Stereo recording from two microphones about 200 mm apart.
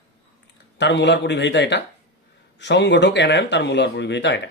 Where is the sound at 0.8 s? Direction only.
60° left (ahead or behind).